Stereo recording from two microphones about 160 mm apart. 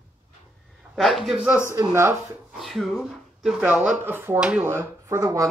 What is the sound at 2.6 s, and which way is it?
Speech, centre (ahead or behind).